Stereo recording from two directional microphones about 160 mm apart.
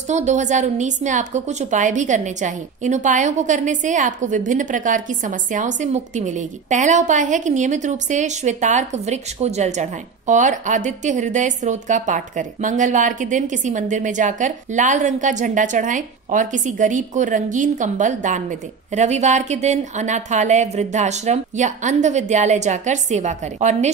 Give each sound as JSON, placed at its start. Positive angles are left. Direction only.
{"t": 0.1, "sound": "a woman's voice", "side_deg": -50}